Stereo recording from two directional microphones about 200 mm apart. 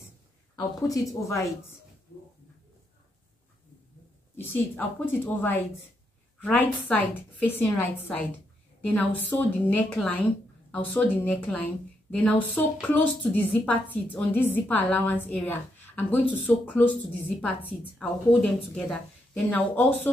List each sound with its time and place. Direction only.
0.6 s speech: 15° left (ahead or behind)
4.4 s speech: 10° left (ahead or behind)